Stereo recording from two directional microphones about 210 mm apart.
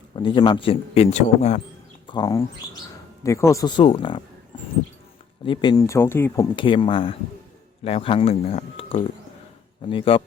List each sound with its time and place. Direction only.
0.2 s speech: 20° left (ahead or behind)
2.0 s speech: 20° left (ahead or behind)
5.5 s speech: 20° left (ahead or behind)